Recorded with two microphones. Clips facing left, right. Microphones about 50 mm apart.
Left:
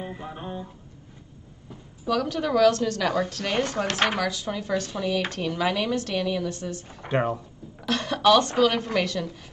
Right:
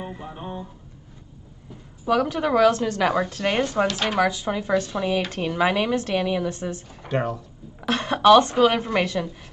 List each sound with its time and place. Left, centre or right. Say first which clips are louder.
2.0 s a woman's voice: right 4 dB; right
3.8 s speech: right 1 dB; left
4.2 s a woman's voice: right 6 dB; right
6.9 s speech: even; left
7.9 s a woman's voice: right 4 dB; right